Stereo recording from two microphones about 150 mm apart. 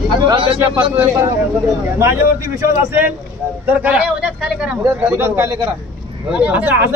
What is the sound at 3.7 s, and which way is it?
Speech, 10° right (ahead or behind).